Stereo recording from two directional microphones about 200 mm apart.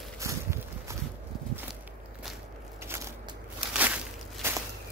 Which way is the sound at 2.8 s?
10° right (ahead or behind).